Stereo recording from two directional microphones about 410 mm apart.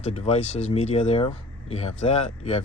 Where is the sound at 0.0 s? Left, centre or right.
Centre.